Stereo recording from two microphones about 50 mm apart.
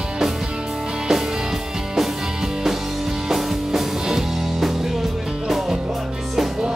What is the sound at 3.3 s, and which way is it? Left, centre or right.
Music, centre.